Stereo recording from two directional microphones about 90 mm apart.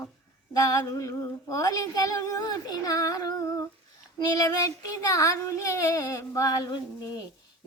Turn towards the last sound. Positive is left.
turn(degrees=45)  # may be behind; listen again after turning